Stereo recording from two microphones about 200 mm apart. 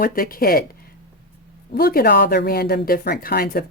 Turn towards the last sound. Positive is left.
turn(degrees=50)  # may be behind; listen again after turning